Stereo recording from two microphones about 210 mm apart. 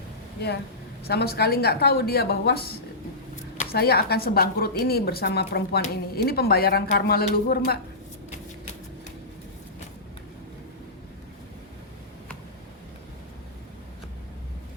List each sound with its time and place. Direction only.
1.0 s speech: 50° left (ahead or behind)